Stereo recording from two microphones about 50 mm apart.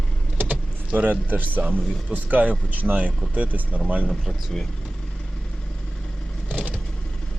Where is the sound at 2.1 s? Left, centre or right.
Right.